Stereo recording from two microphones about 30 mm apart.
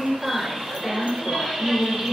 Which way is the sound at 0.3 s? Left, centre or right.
Centre.